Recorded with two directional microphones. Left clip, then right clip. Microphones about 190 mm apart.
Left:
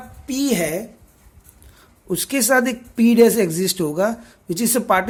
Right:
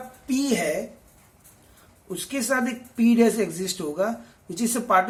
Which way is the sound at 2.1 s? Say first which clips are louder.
Left 8 dB; 50° left (ahead or behind).